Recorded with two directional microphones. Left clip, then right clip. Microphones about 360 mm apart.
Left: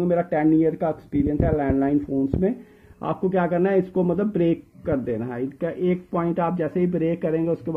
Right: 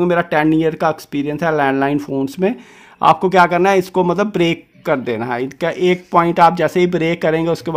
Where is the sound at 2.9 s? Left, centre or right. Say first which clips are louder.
Right 13 dB; right.